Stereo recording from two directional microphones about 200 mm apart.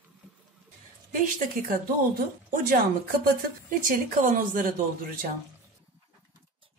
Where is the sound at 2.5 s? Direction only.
45° right (ahead or behind).